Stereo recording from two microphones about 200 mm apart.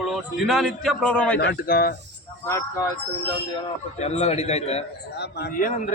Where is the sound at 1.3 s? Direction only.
50° left (ahead or behind).